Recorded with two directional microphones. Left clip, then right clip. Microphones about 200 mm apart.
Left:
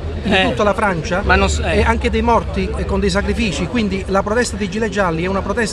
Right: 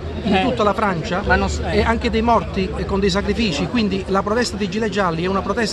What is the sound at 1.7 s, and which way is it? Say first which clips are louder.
Speech: even; 10° left (ahead or behind).